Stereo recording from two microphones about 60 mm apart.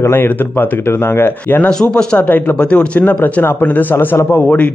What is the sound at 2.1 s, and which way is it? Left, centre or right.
Speech, left.